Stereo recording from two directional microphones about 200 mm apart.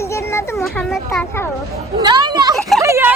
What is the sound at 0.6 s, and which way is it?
Speech, 5° left (ahead or behind).